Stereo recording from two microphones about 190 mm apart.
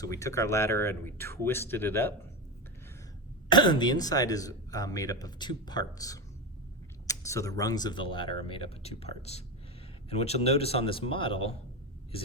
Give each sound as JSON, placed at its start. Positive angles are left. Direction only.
{"t": 0.0, "sound": "speech", "side_deg": 15}
{"t": 3.5, "sound": "a man's voice", "side_deg": 25}